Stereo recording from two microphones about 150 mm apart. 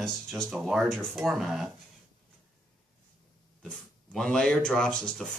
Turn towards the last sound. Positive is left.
turn(degrees=5)  # may be behind; listen again after turning